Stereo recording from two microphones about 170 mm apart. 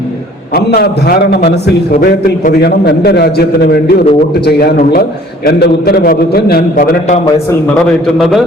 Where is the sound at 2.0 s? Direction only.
55° left (ahead or behind).